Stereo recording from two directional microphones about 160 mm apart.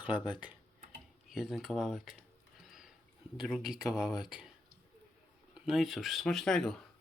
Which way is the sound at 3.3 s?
5° right (ahead or behind).